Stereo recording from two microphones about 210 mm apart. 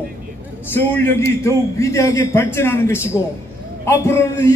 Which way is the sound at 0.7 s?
10° left (ahead or behind).